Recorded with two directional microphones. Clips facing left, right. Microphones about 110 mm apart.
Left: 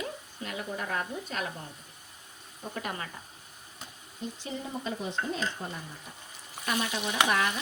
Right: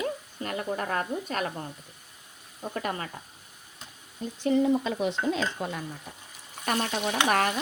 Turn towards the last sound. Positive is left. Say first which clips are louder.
# right 3 dB
turn(degrees=-55)  # may be behind; listen again after turning